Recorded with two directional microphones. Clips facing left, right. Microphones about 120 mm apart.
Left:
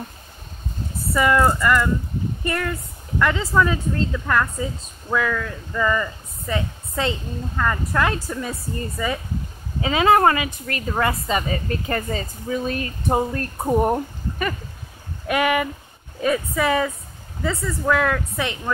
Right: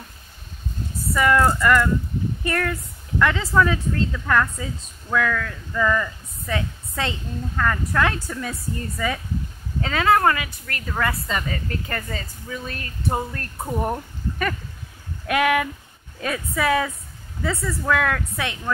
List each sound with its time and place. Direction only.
1.1 s speech: 5° left (ahead or behind)
9.8 s a woman's voice: 15° left (ahead or behind)
15.2 s speech: centre (ahead or behind)